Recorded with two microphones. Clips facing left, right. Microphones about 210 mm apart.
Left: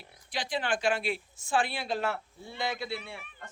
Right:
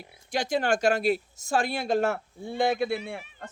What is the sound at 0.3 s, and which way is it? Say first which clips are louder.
A man's voice: right 6 dB; 45° right (ahead or behind).